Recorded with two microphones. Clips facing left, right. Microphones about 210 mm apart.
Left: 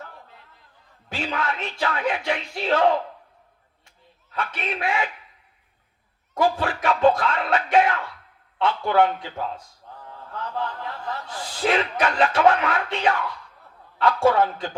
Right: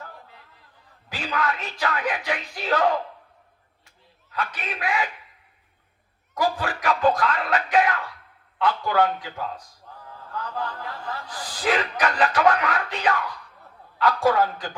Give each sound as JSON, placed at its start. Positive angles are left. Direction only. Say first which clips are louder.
{"t": 1.1, "sound": "speech", "louder": "even", "side_deg": 25}
{"t": 4.4, "sound": "speech", "louder": "left 2 dB", "side_deg": 25}
{"t": 6.3, "sound": "music", "louder": "left 3 dB", "side_deg": 25}
{"t": 8.5, "sound": "speech", "louder": "left 2 dB", "side_deg": 25}
{"t": 10.8, "sound": "speech", "louder": "left 2 dB", "side_deg": 25}